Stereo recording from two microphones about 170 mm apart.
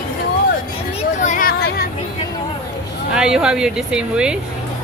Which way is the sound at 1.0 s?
45° left (ahead or behind).